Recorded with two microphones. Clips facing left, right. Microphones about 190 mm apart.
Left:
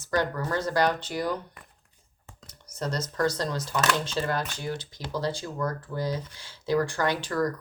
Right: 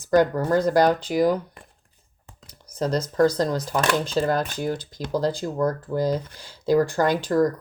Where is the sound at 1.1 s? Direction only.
70° right (ahead or behind).